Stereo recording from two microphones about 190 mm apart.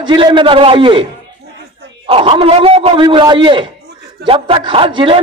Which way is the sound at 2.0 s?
30° right (ahead or behind).